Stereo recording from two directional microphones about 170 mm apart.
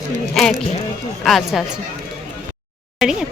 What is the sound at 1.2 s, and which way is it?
Speech, centre (ahead or behind).